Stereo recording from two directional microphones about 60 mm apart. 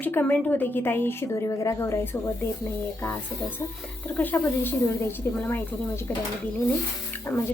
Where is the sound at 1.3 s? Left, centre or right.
Left.